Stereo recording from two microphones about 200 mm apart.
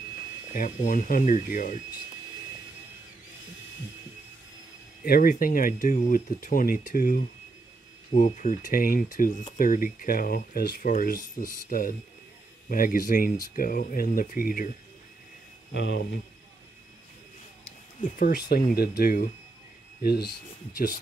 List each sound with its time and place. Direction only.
0.6 s speech: 40° left (ahead or behind)
5.0 s speech: 45° left (ahead or behind)
15.7 s speech: 55° left (ahead or behind)
18.0 s speech: 45° left (ahead or behind)